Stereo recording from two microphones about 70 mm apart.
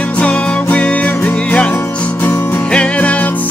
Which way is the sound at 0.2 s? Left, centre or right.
Centre.